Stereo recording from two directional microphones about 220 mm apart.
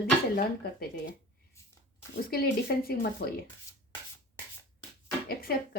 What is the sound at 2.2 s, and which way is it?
Speech, 45° left (ahead or behind).